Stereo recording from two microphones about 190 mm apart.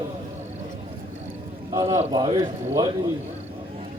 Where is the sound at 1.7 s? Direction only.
15° right (ahead or behind).